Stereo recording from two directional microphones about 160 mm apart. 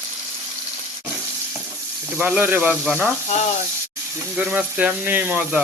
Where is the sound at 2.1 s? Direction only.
10° right (ahead or behind).